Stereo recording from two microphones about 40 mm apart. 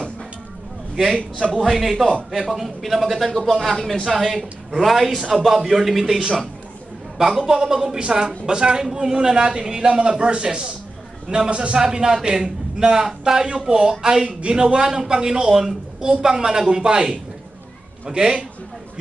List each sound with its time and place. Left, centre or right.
0.9 s a man's voice: centre
4.0 s a man's voice: centre